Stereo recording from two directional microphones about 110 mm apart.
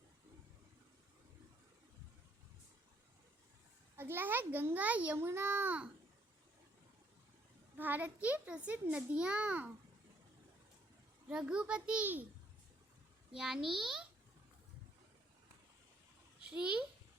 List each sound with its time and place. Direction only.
3.9 s a child's voice: 20° right (ahead or behind)
7.8 s a child's voice: 15° right (ahead or behind)
11.3 s a child's voice: 10° right (ahead or behind)
13.3 s a child's voice: 5° right (ahead or behind)
16.5 s a child's voice: 10° right (ahead or behind)